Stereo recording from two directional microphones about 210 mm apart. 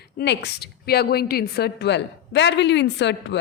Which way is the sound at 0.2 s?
50° left (ahead or behind).